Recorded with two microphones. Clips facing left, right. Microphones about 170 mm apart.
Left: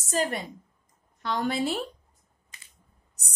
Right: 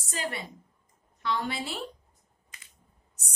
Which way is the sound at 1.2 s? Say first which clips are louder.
Left 4 dB; 40° left (ahead or behind).